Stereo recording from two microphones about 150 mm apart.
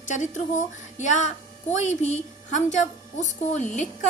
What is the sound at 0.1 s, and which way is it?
A woman's voice, 55° left (ahead or behind).